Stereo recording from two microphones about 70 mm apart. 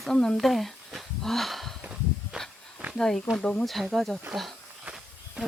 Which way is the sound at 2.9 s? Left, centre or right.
Centre.